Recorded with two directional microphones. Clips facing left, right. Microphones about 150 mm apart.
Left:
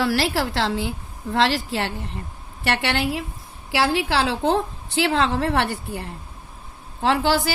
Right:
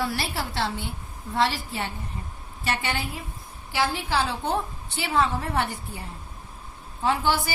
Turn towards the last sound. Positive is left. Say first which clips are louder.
# left 4 dB
turn(degrees=90)